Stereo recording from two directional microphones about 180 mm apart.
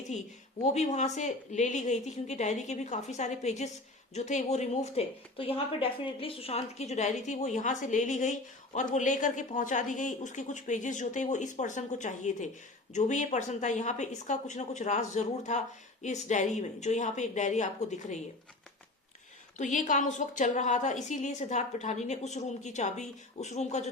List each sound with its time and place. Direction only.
0.6 s speech: 40° left (ahead or behind)
19.5 s speech: 45° left (ahead or behind)